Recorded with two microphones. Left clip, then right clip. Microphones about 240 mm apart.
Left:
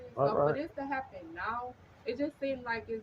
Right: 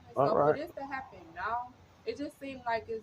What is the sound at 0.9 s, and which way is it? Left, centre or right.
Speech, centre.